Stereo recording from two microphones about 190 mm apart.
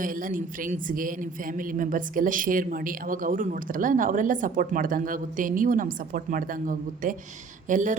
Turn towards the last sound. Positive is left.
turn(degrees=-40)  # may be behind; listen again after turning